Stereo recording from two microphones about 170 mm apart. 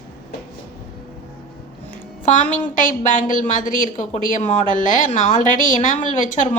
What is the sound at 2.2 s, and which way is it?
A woman's voice, 50° left (ahead or behind).